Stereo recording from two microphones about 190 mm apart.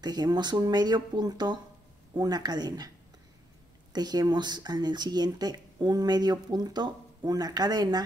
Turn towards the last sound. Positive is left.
turn(degrees=-20)  # may be behind; listen again after turning